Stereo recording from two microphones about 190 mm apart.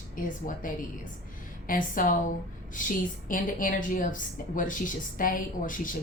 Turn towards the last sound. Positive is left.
turn(degrees=45)  # may be behind; listen again after turning